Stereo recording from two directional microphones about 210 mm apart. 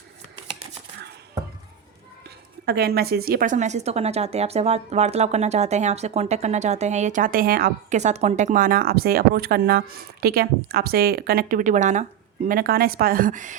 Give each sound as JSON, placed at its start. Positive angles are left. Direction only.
{"t": 2.6, "sound": "a woman's voice", "side_deg": -50}